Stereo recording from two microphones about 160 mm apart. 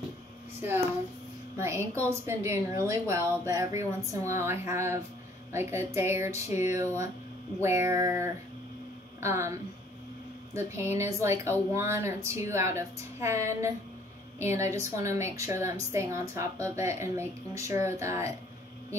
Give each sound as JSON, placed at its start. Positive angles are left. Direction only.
{"t": 0.6, "sound": "a woman's voice", "side_deg": -15}
{"t": 10.5, "sound": "a woman's voice", "side_deg": -15}